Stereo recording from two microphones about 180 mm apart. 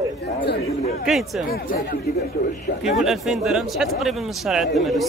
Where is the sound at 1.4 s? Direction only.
55° left (ahead or behind).